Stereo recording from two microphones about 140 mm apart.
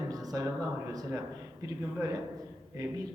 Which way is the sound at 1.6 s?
20° right (ahead or behind).